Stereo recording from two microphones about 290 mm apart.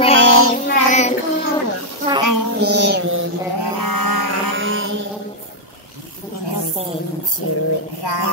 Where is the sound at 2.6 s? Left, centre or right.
Right.